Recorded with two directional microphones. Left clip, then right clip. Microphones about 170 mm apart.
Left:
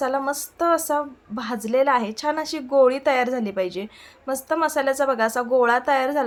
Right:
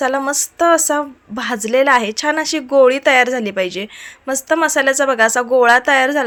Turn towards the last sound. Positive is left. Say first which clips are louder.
# right 8 dB
turn(degrees=-25)  # may be behind; listen again after turning